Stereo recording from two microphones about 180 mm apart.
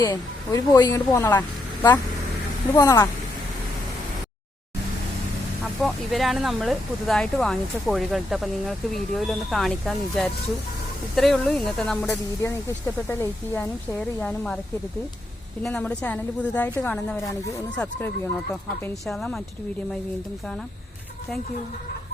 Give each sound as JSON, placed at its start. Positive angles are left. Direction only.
{"t": 0.0, "sound": "speech", "side_deg": 20}
{"t": 2.7, "sound": "speech", "side_deg": 15}
{"t": 5.8, "sound": "speech", "side_deg": 0}
{"t": 12.4, "sound": "speech", "side_deg": 15}
{"t": 15.6, "sound": "speech", "side_deg": 5}